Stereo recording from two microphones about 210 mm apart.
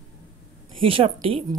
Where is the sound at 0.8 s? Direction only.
25° right (ahead or behind).